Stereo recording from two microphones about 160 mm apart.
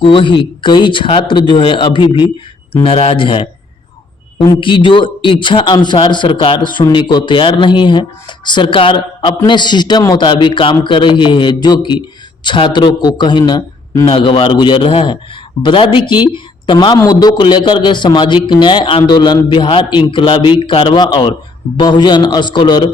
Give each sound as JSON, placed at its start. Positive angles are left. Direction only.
{"t": 0.0, "sound": "a man's voice", "side_deg": 35}